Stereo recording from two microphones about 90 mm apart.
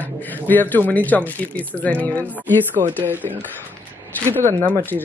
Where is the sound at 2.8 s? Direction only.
40° right (ahead or behind).